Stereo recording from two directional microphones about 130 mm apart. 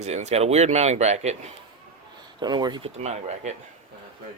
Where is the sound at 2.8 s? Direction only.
60° right (ahead or behind).